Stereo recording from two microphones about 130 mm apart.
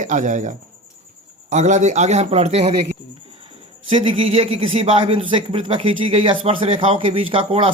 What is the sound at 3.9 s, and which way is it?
A man's voice, 45° right (ahead or behind).